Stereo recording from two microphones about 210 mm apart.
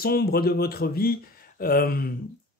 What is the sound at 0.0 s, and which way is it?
Speech, 45° left (ahead or behind).